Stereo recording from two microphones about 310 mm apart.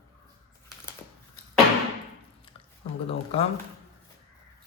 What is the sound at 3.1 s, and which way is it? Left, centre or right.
Speech, left.